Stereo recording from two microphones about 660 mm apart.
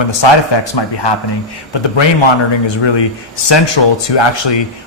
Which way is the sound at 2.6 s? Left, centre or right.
Left.